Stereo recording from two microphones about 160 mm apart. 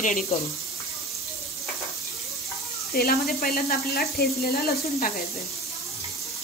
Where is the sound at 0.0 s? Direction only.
55° left (ahead or behind).